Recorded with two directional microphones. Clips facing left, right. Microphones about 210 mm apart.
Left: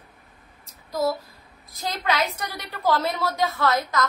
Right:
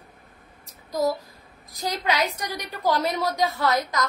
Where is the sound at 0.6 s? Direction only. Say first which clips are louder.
Even; 15° right (ahead or behind).